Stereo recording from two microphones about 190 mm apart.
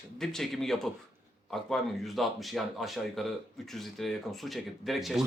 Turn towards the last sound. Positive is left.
turn(degrees=0)  # may be behind; listen again after turning